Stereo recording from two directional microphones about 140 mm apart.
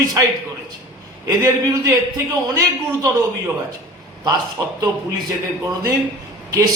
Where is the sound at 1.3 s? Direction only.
25° right (ahead or behind).